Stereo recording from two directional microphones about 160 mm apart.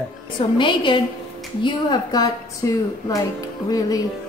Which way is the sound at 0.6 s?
30° left (ahead or behind).